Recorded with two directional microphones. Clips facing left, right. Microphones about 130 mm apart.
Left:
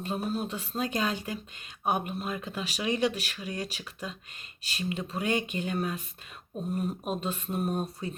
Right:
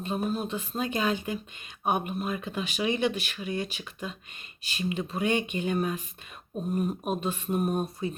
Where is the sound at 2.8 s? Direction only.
35° left (ahead or behind).